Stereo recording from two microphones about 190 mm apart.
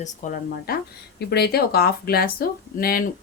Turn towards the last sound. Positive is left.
turn(degrees=50)  # may be behind; listen again after turning